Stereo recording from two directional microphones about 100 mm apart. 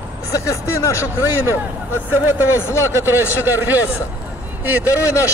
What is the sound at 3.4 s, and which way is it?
Speech, 20° right (ahead or behind).